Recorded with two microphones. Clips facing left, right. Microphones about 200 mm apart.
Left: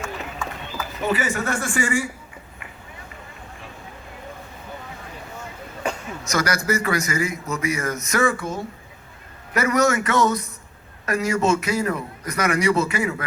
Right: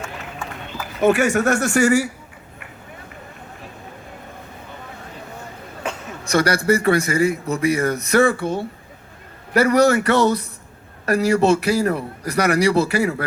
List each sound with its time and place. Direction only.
1.1 s speech: 75° right (ahead or behind)
1.8 s a man's voice: 40° right (ahead or behind)
6.2 s a man's voice: 30° right (ahead or behind)